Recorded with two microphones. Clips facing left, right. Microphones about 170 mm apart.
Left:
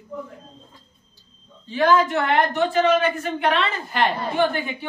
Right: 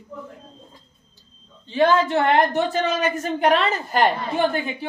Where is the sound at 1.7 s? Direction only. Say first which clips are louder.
Even; 30° right (ahead or behind).